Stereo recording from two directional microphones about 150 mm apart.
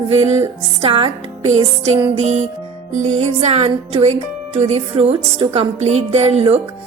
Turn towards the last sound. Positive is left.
turn(degrees=-40)  # may be behind; listen again after turning